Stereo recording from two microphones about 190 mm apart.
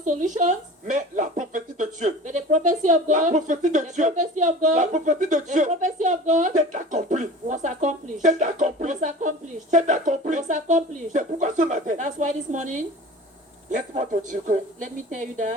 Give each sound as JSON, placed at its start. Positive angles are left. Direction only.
{"t": 0.0, "sound": "speech", "side_deg": -40}